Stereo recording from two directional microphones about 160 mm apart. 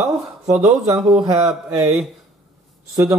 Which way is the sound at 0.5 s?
10° right (ahead or behind).